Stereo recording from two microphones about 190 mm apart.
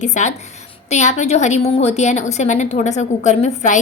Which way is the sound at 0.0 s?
40° left (ahead or behind).